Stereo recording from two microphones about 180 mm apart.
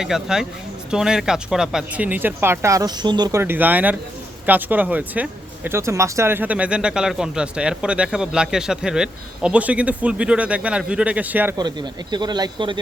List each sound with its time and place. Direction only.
0.0 s speech: 5° right (ahead or behind)
11.5 s speech: 25° right (ahead or behind)